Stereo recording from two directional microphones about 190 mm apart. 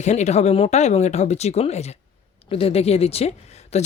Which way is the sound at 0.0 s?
35° left (ahead or behind).